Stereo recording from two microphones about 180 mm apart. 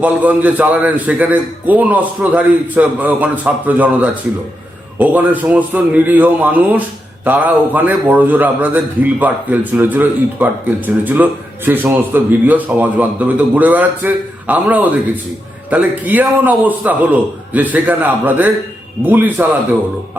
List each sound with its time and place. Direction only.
0.0 s a man's voice: 10° right (ahead or behind)